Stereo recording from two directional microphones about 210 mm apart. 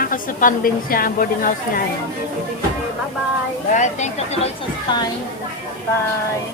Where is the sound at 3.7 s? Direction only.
35° left (ahead or behind).